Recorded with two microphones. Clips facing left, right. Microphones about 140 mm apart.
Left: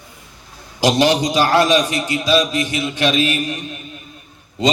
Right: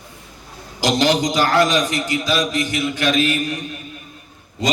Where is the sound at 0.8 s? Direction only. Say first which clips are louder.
Left 2 dB; 20° left (ahead or behind).